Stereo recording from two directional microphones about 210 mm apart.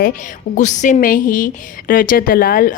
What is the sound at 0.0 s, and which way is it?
Speech, 35° left (ahead or behind).